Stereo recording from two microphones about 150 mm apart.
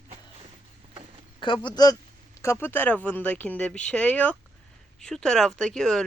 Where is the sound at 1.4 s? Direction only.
30° left (ahead or behind).